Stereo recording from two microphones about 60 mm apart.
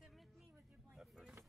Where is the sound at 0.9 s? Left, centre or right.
Centre.